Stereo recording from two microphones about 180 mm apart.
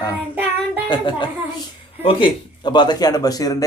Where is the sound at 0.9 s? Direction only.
25° left (ahead or behind).